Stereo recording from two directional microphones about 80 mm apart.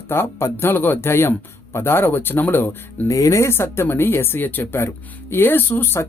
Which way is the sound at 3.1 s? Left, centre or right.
Left.